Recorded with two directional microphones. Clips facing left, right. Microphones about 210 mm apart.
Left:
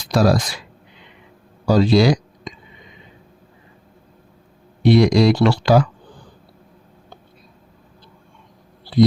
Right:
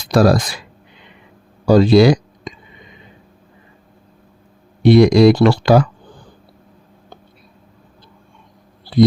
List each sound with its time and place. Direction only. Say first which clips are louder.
0.1 s speech: right 4 dB; 55° right (ahead or behind)
1.6 s speech: right 5 dB; 55° right (ahead or behind)
4.8 s speech: right 4 dB; 55° right (ahead or behind)